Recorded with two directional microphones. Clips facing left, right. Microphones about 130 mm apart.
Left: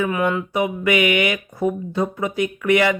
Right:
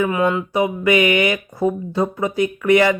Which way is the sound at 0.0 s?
25° right (ahead or behind).